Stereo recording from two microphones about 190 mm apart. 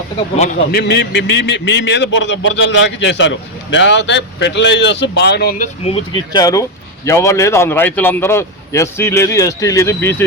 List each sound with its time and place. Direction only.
0.7 s a man's voice: 60° left (ahead or behind)
5.8 s speech: 25° left (ahead or behind)